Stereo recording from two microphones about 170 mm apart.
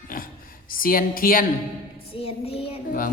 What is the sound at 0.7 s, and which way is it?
Mantra, 55° left (ahead or behind).